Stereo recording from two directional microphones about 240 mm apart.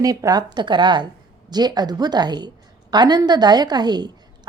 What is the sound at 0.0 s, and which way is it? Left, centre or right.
A woman's voice, centre.